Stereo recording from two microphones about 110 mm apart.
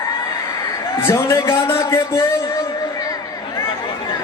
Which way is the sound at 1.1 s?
25° left (ahead or behind).